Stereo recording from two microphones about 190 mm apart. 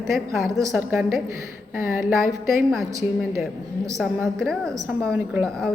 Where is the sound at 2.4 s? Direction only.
15° right (ahead or behind).